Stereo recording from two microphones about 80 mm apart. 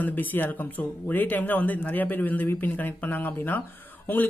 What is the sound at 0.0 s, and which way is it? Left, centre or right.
A man's voice, left.